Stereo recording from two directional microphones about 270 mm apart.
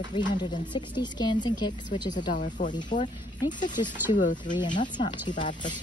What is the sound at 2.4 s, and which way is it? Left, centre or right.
Speech, left.